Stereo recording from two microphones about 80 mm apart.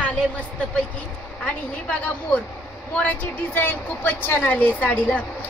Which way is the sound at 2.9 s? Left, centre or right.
Centre.